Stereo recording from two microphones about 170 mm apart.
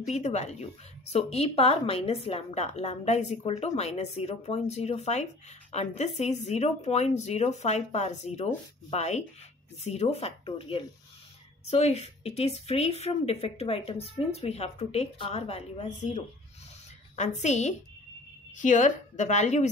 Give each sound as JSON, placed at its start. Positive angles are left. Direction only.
{"t": 0.1, "sound": "a woman's voice", "side_deg": 40}